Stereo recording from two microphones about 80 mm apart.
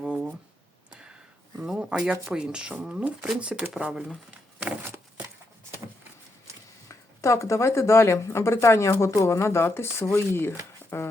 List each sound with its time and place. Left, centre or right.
0.0 s a sound: centre
1.6 s speech: centre
6.8 s speech: left